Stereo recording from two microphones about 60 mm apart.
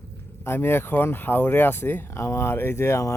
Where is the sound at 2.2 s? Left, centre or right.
Left.